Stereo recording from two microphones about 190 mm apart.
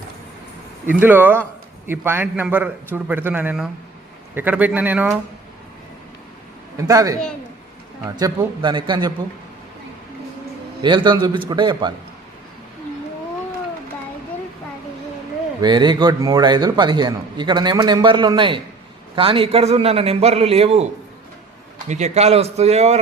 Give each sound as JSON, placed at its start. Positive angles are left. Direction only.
{"t": 0.9, "sound": "a man's voice", "side_deg": -10}
{"t": 6.7, "sound": "a man's voice", "side_deg": -20}
{"t": 10.8, "sound": "a man's voice", "side_deg": -25}
{"t": 15.6, "sound": "a man's voice", "side_deg": -25}
{"t": 21.8, "sound": "a man's voice", "side_deg": -35}